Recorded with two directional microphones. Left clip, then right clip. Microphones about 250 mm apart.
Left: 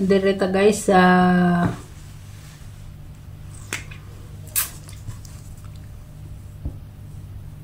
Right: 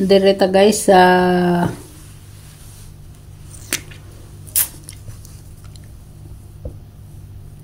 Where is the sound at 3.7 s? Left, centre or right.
Right.